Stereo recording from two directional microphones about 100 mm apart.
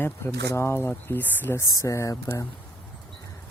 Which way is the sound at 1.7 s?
30° left (ahead or behind).